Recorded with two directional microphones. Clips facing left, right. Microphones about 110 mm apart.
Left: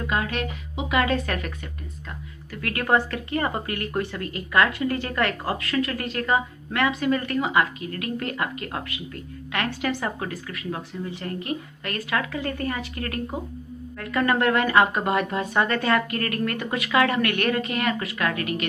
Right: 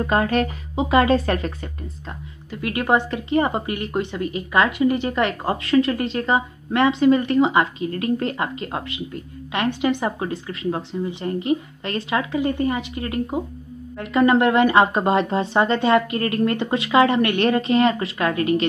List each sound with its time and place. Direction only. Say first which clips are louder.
0.0 s speech: right 7 dB; 40° right (ahead or behind)